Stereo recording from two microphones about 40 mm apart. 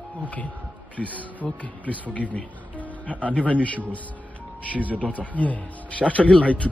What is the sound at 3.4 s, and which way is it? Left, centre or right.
Speech, right.